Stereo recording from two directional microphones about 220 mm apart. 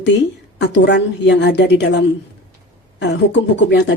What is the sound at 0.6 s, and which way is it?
Speech, 50° left (ahead or behind).